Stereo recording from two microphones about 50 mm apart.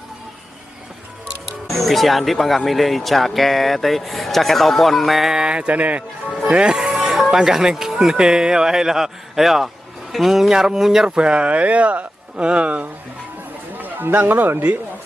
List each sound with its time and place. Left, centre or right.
1.7 s speech: centre
5.4 s speech: centre
6.5 s speech: centre
13.7 s a man's voice: right